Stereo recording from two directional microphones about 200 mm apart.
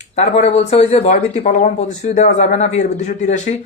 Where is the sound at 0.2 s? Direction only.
30° left (ahead or behind).